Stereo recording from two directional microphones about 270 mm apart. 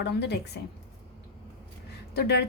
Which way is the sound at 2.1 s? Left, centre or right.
Left.